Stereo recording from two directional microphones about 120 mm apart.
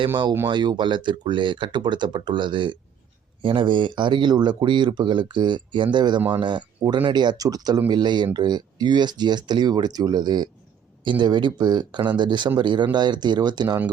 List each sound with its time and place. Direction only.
0.5 s speech: 40° right (ahead or behind)